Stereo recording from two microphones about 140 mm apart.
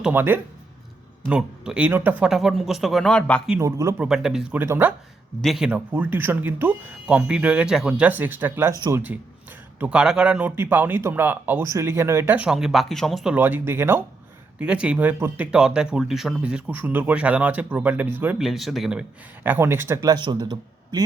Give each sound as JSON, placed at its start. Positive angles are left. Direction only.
{"t": 0.0, "sound": "speech", "side_deg": -15}
{"t": 3.6, "sound": "speech", "side_deg": -20}
{"t": 4.0, "sound": "speech", "side_deg": -5}
{"t": 5.4, "sound": "speech", "side_deg": 0}
{"t": 13.3, "sound": "speech", "side_deg": -15}
{"t": 18.3, "sound": "speech", "side_deg": 0}
{"t": 20.1, "sound": "a man's voice", "side_deg": -30}